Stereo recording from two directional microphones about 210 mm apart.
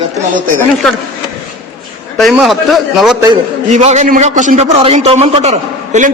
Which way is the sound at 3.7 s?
35° right (ahead or behind).